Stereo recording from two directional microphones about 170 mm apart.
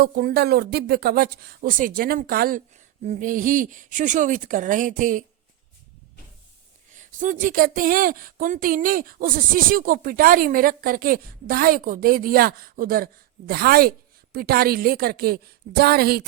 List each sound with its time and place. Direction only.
0.0 s speech: 60° right (ahead or behind)
3.0 s speech: 45° right (ahead or behind)
6.9 s speech: 50° right (ahead or behind); by 16.2 s 65° right (ahead or behind)